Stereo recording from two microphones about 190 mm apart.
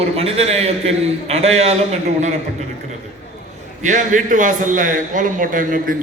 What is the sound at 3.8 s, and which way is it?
A man's voice, 40° right (ahead or behind).